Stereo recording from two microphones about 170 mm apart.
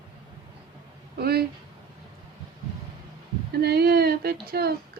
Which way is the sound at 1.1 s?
65° right (ahead or behind).